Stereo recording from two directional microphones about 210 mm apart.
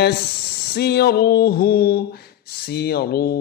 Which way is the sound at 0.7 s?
50° left (ahead or behind).